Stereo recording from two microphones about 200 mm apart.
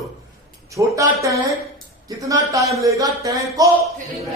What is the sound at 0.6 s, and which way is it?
Speech, 15° right (ahead or behind).